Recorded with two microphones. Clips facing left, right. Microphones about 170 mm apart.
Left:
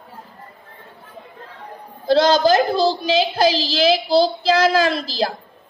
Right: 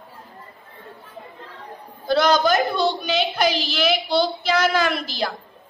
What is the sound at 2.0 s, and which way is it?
A man's voice, 30° left (ahead or behind).